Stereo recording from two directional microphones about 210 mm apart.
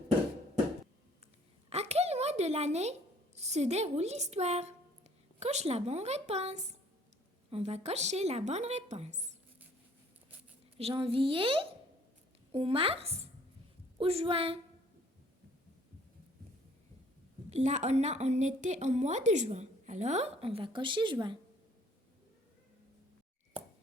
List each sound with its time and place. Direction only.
1.7 s a sound: 30° right (ahead or behind)
3.3 s a woman's voice: 30° right (ahead or behind)
10.8 s a woman's voice: 25° right (ahead or behind)
17.5 s a woman's voice: 30° right (ahead or behind)